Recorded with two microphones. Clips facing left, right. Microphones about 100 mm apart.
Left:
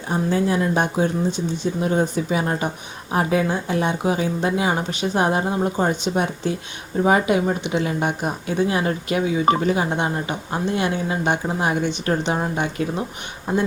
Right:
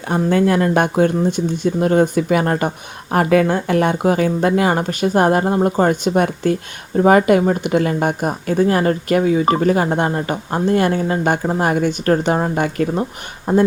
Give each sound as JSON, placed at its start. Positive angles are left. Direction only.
{"t": 0.1, "sound": "speech", "side_deg": -65}